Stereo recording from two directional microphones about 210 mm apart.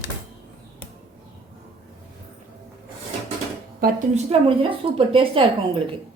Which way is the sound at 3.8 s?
30° right (ahead or behind).